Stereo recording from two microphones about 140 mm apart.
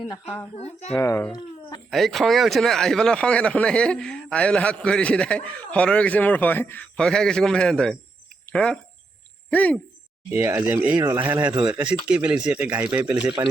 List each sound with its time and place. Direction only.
0.5 s speech: 50° left (ahead or behind)
0.9 s speech: 20° left (ahead or behind)
1.9 s speech: centre (ahead or behind)
10.3 s speech: 15° right (ahead or behind)
13.2 s speech: 30° right (ahead or behind)